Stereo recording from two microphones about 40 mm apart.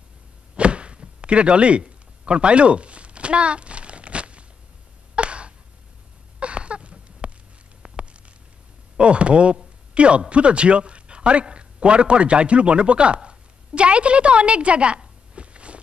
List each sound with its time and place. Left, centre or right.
0.6 s chopping: right
5.1 s sigh: right
6.4 s a sound: right
8.9 s a man's voice: right